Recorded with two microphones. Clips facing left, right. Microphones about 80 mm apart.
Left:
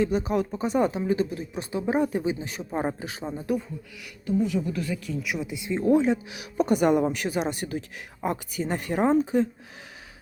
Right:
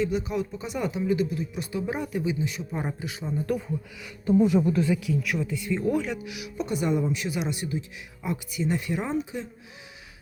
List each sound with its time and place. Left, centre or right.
0.0 s speech: left
4.3 s speech: right
5.2 s speech: centre; by 6.5 s left
6.6 s speech: left